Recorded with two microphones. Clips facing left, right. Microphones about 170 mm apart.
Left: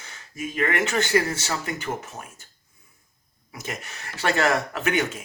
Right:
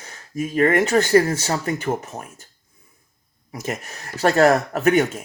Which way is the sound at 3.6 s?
40° right (ahead or behind).